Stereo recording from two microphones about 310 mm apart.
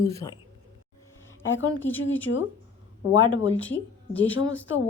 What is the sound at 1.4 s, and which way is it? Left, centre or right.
Speech, left.